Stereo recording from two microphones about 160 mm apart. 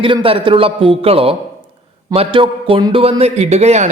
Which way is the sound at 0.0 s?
35° right (ahead or behind).